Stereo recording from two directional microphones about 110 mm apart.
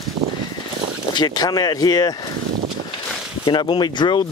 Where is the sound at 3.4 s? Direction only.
45° left (ahead or behind).